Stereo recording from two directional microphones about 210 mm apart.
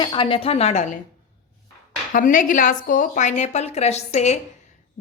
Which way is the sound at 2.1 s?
40° left (ahead or behind).